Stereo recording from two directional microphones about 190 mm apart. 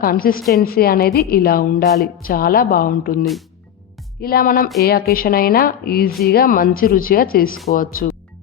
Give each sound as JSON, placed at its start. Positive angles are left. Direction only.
{"t": 0.0, "sound": "speech", "side_deg": 50}
{"t": 4.2, "sound": "speech", "side_deg": 50}